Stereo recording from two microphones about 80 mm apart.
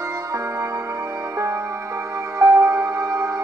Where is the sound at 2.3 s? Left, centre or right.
Right.